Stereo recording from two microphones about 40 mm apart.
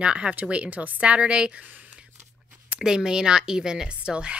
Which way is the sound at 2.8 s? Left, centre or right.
Centre.